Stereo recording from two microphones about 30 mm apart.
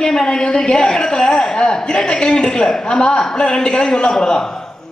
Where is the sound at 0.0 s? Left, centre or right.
Left.